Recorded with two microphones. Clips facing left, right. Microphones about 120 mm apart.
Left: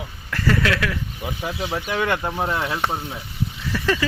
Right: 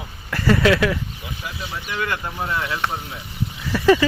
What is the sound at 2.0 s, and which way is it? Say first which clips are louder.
Speech: left 2 dB; 30° left (ahead or behind).